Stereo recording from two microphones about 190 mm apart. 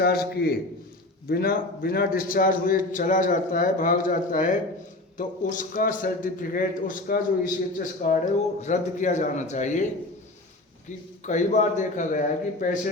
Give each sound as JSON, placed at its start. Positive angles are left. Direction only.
{"t": 0.0, "sound": "a man's voice", "side_deg": 55}
{"t": 10.8, "sound": "a man's voice", "side_deg": 40}